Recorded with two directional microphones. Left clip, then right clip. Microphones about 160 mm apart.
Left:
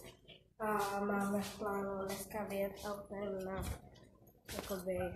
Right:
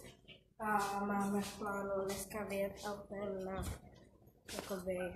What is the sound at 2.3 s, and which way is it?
Speech, centre (ahead or behind).